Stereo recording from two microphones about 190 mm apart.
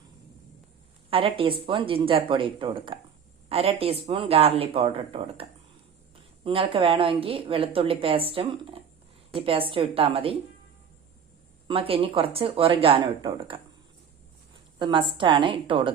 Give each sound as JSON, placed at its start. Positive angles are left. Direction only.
{"t": 1.1, "sound": "a woman's voice", "side_deg": -30}
{"t": 11.7, "sound": "a woman's voice", "side_deg": -30}
{"t": 14.8, "sound": "a woman's voice", "side_deg": -25}